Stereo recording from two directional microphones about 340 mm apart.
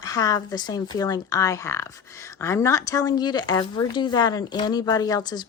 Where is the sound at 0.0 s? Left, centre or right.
Centre.